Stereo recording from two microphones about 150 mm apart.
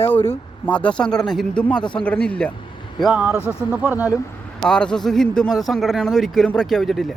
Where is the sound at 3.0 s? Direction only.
10° right (ahead or behind).